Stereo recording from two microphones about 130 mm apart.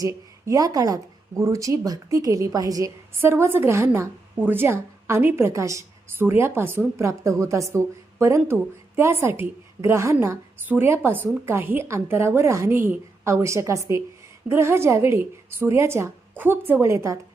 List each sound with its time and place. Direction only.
0.0 s a woman's voice: 25° right (ahead or behind)